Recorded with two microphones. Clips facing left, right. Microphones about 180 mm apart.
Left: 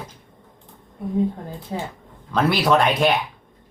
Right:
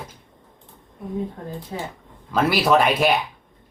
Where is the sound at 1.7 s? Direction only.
30° left (ahead or behind).